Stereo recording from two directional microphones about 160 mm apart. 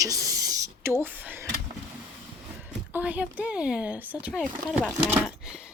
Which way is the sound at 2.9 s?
10° right (ahead or behind).